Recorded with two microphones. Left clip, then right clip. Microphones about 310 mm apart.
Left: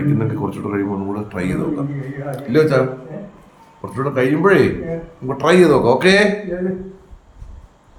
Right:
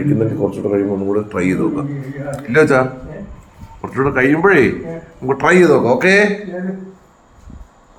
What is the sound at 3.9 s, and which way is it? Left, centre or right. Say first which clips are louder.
A man's voice: right 4 dB; centre.